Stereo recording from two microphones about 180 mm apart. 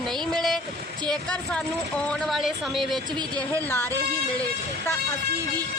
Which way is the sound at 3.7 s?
10° left (ahead or behind).